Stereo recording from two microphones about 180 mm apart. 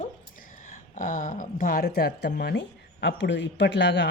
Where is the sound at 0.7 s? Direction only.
45° left (ahead or behind).